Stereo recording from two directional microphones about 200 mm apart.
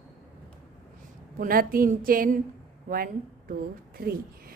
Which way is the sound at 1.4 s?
45° right (ahead or behind).